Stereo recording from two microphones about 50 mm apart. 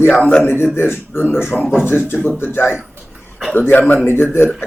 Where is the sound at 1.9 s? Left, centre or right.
Left.